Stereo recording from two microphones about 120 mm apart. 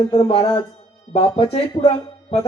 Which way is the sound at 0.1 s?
50° left (ahead or behind).